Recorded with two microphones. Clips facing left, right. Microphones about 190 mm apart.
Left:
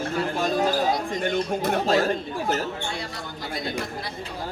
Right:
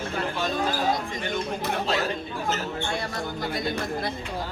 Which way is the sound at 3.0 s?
50° right (ahead or behind).